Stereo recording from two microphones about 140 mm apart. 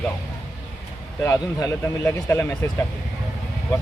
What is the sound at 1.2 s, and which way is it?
A man's voice, 20° left (ahead or behind).